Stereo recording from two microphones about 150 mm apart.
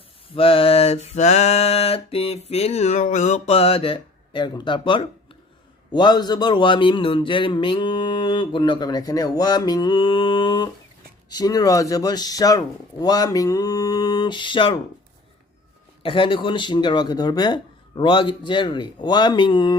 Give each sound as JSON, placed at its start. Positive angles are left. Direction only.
{"t": 0.3, "sound": "a man's voice", "side_deg": 40}
{"t": 16.0, "sound": "a man's voice", "side_deg": 35}